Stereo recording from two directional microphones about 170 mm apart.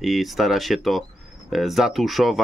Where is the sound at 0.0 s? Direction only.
Centre (ahead or behind).